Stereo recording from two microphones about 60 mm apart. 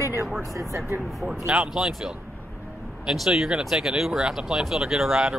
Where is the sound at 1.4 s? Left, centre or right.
Centre.